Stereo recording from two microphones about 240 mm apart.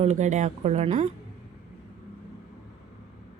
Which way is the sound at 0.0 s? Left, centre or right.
Right.